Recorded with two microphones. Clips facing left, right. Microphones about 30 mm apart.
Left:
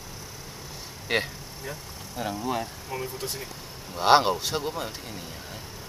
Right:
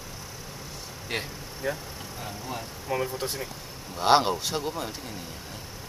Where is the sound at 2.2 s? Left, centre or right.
Left.